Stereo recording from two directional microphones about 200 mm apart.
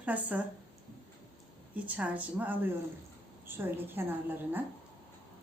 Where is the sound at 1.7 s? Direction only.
5° right (ahead or behind).